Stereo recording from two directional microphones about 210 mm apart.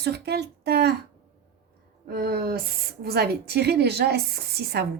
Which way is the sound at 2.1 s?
50° right (ahead or behind).